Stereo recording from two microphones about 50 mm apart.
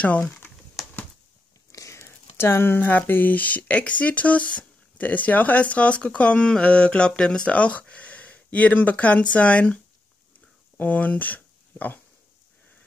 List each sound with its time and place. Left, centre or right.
0.0 s speech: left
0.8 s a sound: centre
1.7 s speech: left; by 7.5 s centre
7.5 s speech: left
10.8 s speech: left